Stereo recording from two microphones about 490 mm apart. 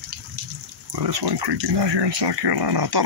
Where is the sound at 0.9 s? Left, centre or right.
Right.